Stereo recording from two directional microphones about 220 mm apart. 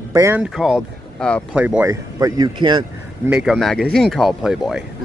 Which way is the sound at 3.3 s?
5° right (ahead or behind).